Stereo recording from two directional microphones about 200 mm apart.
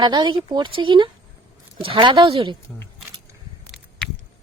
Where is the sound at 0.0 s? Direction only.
20° right (ahead or behind).